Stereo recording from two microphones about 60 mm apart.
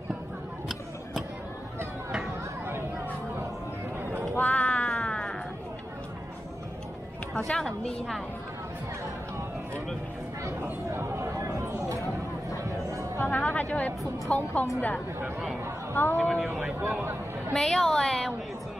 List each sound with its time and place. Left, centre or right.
2.6 s a sound: right
4.4 s music: left
7.3 s a sound: centre
10.6 s chatter: right
12.6 s music: right
13.2 s music: left
14.3 s a woman's voice: left
15.9 s speech: left
16.2 s speech: centre
17.5 s a woman's voice: centre